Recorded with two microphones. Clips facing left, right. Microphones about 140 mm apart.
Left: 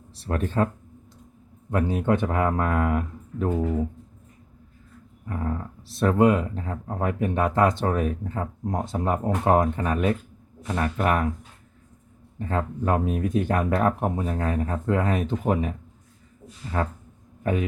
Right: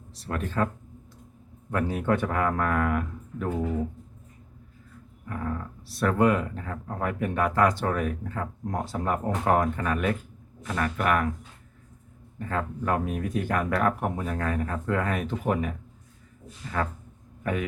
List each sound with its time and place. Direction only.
0.3 s speech: 30° left (ahead or behind)
1.7 s speech: 20° left (ahead or behind)
5.9 s speech: 25° left (ahead or behind)
12.4 s speech: 25° left (ahead or behind)
16.7 s a man's voice: 30° left (ahead or behind)